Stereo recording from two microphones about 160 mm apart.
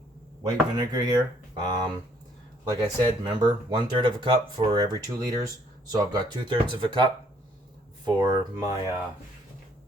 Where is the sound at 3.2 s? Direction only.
25° right (ahead or behind).